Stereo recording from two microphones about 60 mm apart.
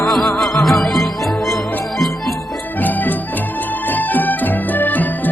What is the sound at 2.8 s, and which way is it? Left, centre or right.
Music, left.